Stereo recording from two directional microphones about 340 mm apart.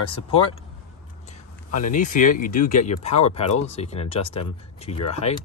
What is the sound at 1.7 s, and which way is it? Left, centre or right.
Speech, left.